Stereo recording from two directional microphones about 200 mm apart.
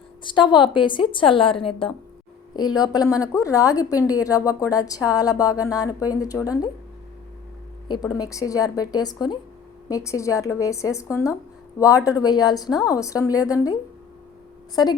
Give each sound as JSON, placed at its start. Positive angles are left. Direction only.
{"t": 0.2, "sound": "a woman's voice", "side_deg": 25}
{"t": 7.9, "sound": "a woman's voice", "side_deg": 20}